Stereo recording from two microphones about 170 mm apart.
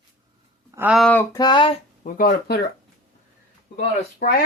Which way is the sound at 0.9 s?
Centre (ahead or behind).